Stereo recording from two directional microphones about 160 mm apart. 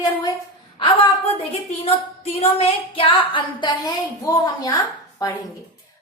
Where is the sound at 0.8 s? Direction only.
35° left (ahead or behind).